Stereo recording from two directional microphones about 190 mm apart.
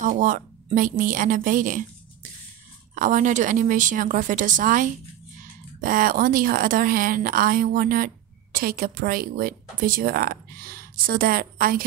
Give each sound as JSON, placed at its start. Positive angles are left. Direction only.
{"t": 0.0, "sound": "speech", "side_deg": -45}
{"t": 2.9, "sound": "speech", "side_deg": -45}